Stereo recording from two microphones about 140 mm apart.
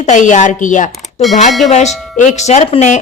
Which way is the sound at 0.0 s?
60° left (ahead or behind).